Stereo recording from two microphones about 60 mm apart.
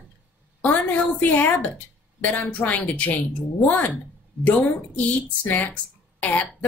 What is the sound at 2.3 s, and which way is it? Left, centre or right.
Speech, left.